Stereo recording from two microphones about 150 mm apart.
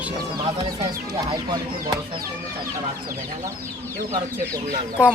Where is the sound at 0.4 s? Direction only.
30° right (ahead or behind).